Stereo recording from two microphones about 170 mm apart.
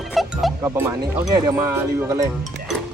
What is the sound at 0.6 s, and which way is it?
Speech, 15° right (ahead or behind).